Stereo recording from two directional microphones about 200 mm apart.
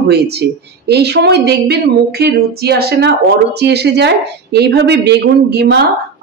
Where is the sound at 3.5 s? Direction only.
55° right (ahead or behind).